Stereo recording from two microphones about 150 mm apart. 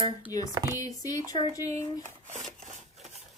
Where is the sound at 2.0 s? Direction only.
50° right (ahead or behind).